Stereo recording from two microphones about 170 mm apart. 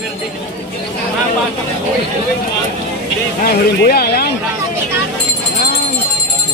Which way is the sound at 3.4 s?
65° left (ahead or behind).